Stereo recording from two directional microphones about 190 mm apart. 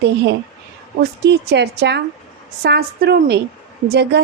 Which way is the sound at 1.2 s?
60° right (ahead or behind).